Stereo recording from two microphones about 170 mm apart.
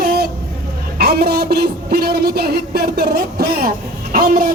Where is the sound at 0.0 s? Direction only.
60° right (ahead or behind).